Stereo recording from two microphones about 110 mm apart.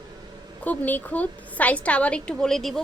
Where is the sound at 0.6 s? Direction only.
15° left (ahead or behind).